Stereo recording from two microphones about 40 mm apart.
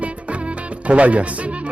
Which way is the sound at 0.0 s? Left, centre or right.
Right.